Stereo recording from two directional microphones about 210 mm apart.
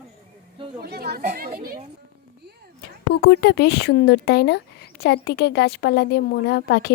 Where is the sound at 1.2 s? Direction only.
35° right (ahead or behind).